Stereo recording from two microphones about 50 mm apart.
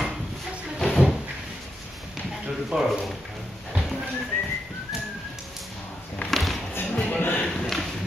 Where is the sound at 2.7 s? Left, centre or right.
Centre.